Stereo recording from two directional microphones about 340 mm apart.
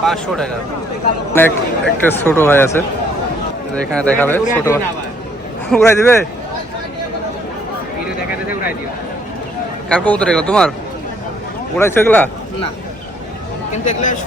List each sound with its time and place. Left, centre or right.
0.0 s speech: centre
4.0 s a man's voice: centre
9.9 s speech: centre
11.8 s a man's voice: centre
13.8 s speech: left